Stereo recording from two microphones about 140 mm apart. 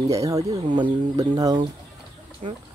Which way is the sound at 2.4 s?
50° right (ahead or behind).